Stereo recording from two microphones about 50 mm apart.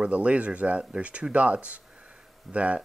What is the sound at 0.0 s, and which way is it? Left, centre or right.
Speech, right.